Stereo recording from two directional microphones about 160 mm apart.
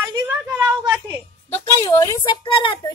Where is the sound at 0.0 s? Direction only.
20° right (ahead or behind).